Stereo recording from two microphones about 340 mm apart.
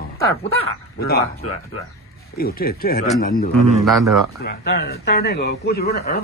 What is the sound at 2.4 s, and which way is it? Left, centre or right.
Speech, left.